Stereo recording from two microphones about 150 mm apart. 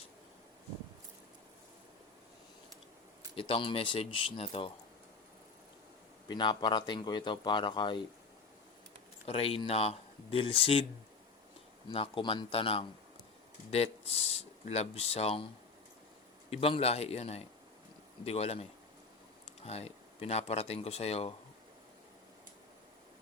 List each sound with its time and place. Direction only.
3.3 s speech: 35° left (ahead or behind)
6.2 s speech: 30° left (ahead or behind)
9.2 s speech: 40° left (ahead or behind)
11.9 s a man's voice: 35° left (ahead or behind)
16.5 s a man's voice: 40° left (ahead or behind)